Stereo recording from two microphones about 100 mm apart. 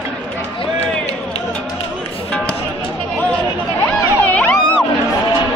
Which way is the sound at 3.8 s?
15° left (ahead or behind).